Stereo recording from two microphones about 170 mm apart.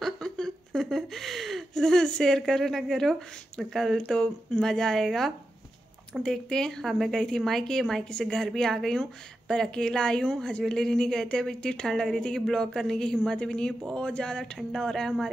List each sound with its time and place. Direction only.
0.0 s speech: 5° left (ahead or behind)